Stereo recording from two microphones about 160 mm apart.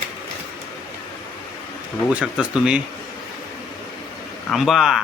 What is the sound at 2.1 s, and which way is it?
Speech, 5° right (ahead or behind).